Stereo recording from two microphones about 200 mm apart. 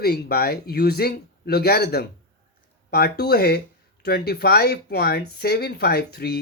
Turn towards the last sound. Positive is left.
turn(degrees=55)  # may be behind; listen again after turning